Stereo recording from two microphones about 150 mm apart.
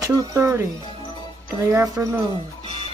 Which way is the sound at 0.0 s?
25° right (ahead or behind).